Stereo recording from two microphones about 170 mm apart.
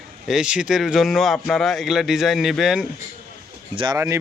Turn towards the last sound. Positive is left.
turn(degrees=-15)  # may be behind; listen again after turning